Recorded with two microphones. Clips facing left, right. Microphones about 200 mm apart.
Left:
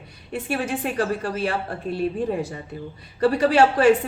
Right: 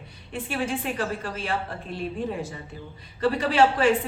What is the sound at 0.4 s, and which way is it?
A woman's voice, 40° left (ahead or behind).